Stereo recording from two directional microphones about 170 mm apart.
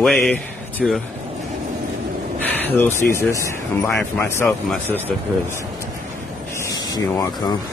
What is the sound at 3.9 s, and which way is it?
Speech, 10° left (ahead or behind).